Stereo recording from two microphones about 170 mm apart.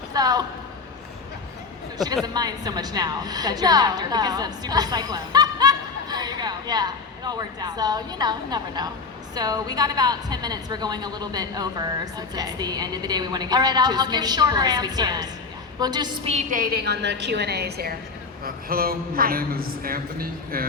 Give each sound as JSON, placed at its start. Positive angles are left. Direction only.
{"t": 0.1, "sound": "a sound", "side_deg": -20}
{"t": 2.2, "sound": "a woman's voice", "side_deg": -25}
{"t": 16.3, "sound": "a woman's voice", "side_deg": -45}